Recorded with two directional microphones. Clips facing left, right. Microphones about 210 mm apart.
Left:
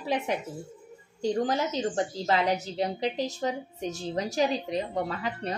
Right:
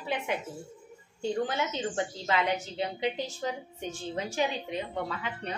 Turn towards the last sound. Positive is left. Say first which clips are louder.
# left 4 dB
turn(degrees=35)  # may be behind; listen again after turning